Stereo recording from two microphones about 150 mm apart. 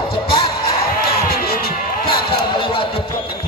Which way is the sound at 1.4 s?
90° left.